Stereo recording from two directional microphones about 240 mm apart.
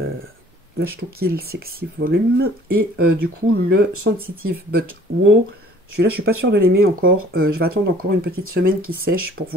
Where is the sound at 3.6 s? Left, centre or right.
Right.